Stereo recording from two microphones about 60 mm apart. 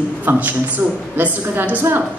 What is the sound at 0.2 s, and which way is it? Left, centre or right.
A woman's voice, right.